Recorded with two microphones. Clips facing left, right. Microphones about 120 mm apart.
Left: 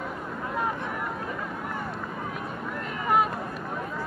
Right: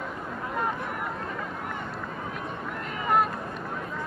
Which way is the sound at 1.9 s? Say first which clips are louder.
Left 1 dB; centre (ahead or behind).